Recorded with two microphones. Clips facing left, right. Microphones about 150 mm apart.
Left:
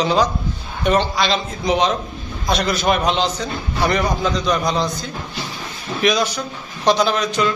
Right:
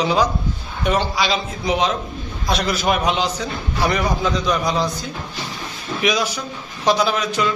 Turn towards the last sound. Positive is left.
turn(degrees=-5)  # may be behind; listen again after turning